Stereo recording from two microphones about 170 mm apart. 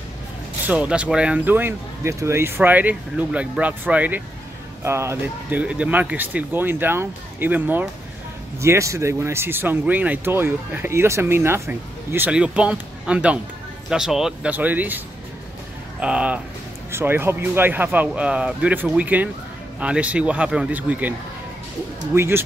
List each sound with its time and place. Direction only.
0.7 s speech: 5° right (ahead or behind)
16.0 s speech: 5° right (ahead or behind)
22.1 s speech: 15° right (ahead or behind)